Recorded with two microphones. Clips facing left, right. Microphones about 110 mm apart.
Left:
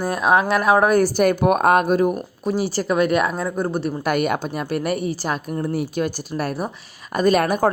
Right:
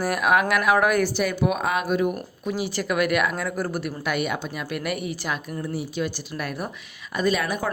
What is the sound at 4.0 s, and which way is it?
Speech, 45° left (ahead or behind).